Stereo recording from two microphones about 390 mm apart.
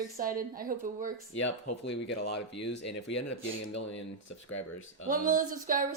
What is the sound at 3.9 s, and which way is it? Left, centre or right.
Speech, left.